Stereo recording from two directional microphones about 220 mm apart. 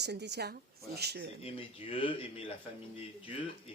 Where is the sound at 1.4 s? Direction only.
25° left (ahead or behind).